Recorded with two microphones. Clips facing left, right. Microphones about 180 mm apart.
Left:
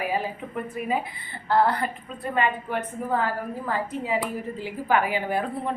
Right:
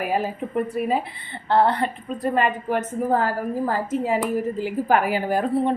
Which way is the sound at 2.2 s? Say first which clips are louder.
Right 4 dB; 40° right (ahead or behind).